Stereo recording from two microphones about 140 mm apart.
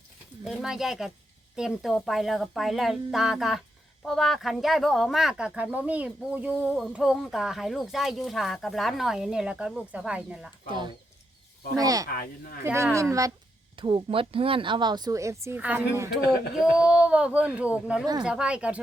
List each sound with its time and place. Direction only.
0.4 s speech: 5° right (ahead or behind)
10.7 s a woman's voice: 35° right (ahead or behind)
12.1 s speech: 90° left
12.6 s a woman's voice: 20° right (ahead or behind)
13.7 s a woman's voice: 40° right (ahead or behind); by 18.8 s 10° right (ahead or behind)